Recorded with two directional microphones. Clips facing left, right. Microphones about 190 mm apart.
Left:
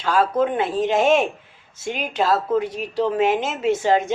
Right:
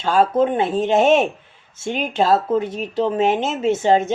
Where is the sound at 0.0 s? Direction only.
25° right (ahead or behind).